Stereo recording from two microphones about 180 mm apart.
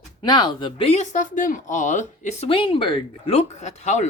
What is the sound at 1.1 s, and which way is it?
Speech, 45° left (ahead or behind).